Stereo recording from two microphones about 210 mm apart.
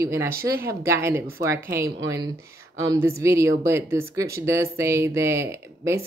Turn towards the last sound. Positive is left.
turn(degrees=-15)  # may be behind; listen again after turning